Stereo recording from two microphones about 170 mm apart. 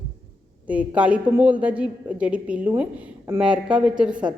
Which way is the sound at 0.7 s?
10° right (ahead or behind).